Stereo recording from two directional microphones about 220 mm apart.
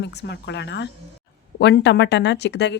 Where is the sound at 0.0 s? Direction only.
50° left (ahead or behind).